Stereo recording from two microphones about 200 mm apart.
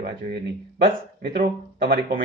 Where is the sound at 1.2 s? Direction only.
50° right (ahead or behind).